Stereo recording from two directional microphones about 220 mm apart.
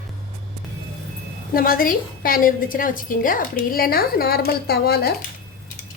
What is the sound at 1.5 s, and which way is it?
A woman's voice, 40° left (ahead or behind).